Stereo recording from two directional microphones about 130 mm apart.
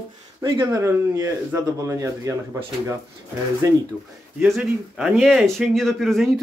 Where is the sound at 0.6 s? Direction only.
20° right (ahead or behind).